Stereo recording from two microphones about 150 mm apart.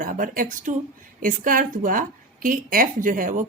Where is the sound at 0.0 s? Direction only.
65° right (ahead or behind).